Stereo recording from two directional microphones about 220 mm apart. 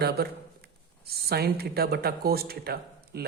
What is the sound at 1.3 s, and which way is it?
Speech, 45° right (ahead or behind).